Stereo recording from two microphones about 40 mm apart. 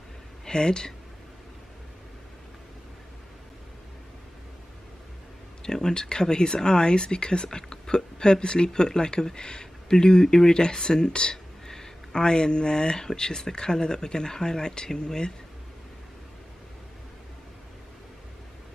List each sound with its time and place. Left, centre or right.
0.5 s speech: centre
5.6 s speech: centre